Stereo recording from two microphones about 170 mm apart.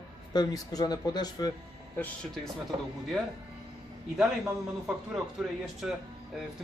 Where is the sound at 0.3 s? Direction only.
20° left (ahead or behind).